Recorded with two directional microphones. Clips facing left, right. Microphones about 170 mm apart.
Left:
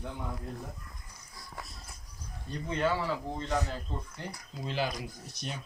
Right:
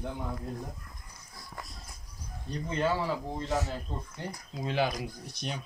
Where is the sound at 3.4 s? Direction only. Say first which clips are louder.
Right 1 dB; 5° right (ahead or behind).